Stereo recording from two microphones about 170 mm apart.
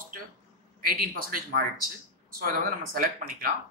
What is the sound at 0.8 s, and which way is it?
Speech, 60° right (ahead or behind).